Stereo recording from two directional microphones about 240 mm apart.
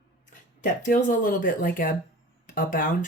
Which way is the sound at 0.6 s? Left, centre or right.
Left.